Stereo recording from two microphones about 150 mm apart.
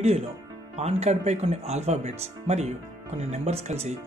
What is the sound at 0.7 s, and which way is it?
Speech, 45° right (ahead or behind).